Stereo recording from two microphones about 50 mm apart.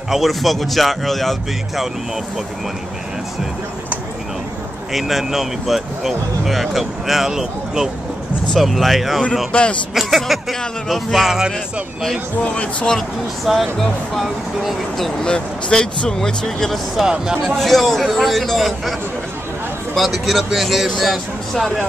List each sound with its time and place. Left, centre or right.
0.1 s speech: centre
4.9 s speech: centre
8.5 s speech: centre
9.5 s speech: left
9.9 s speech: centre
11.2 s speech: centre
12.4 s speech: left
13.7 s speech: centre
15.2 s speech: centre
16.9 s speech: centre
17.6 s speech: centre
20.0 s speech: centre